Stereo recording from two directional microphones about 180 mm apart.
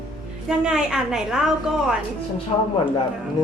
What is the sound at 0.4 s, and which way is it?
A woman's voice, 5° right (ahead or behind).